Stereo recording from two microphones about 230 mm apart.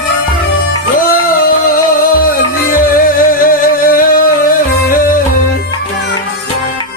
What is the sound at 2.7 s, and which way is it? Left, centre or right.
Music, left.